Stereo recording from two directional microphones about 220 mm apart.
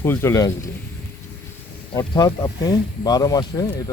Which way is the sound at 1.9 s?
20° left (ahead or behind).